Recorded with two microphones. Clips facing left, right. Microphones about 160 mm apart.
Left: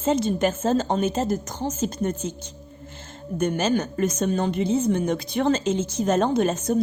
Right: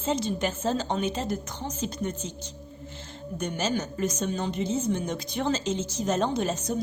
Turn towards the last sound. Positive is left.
turn(degrees=55)  # may be behind; listen again after turning